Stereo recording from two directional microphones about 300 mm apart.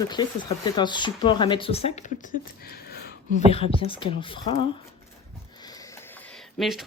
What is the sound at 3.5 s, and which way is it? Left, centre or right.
Speech, centre.